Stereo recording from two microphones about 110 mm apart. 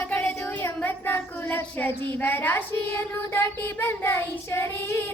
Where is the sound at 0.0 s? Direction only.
15° left (ahead or behind).